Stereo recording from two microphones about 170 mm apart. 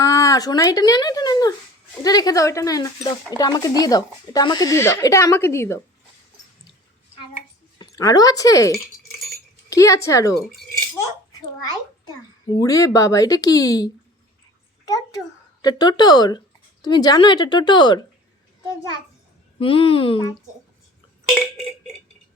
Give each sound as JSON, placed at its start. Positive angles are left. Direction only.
{"t": 0.0, "sound": "speech", "side_deg": 20}
{"t": 7.8, "sound": "speech", "side_deg": 20}
{"t": 11.4, "sound": "a child's voice", "side_deg": 25}
{"t": 14.8, "sound": "a sound", "side_deg": 20}
{"t": 15.6, "sound": "speech", "side_deg": 25}
{"t": 19.5, "sound": "a woman's voice", "side_deg": 35}